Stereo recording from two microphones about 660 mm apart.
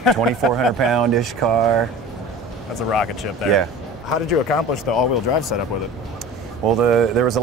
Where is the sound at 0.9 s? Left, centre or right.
Right.